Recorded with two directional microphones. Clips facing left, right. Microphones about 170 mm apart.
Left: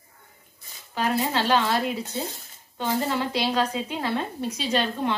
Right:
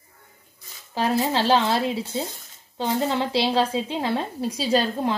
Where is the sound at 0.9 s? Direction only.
30° right (ahead or behind).